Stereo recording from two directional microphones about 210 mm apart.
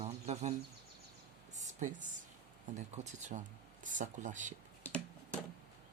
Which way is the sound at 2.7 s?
35° right (ahead or behind).